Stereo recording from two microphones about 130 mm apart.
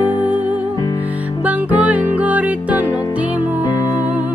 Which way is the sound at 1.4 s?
10° right (ahead or behind).